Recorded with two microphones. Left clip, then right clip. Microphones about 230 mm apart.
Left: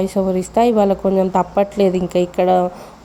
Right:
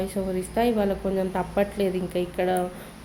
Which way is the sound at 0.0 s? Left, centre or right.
Left.